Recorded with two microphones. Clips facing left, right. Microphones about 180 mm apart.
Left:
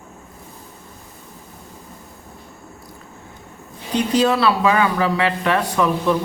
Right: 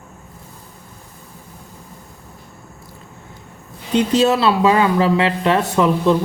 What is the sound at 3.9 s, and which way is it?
Speech, 25° right (ahead or behind).